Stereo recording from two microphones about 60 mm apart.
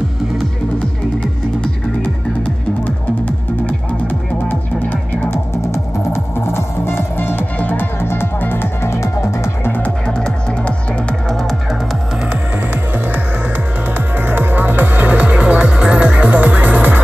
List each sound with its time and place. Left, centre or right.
3.3 s music: left
5.3 s music: left
9.7 s music: left
10.0 s music: centre
13.9 s music: right